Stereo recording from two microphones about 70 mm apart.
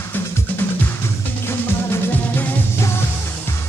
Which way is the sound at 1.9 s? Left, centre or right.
Left.